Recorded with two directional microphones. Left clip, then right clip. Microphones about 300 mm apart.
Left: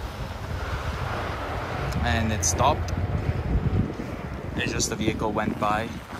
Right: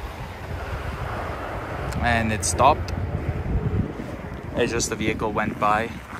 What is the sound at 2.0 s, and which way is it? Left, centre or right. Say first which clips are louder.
Speech: right 4 dB; centre.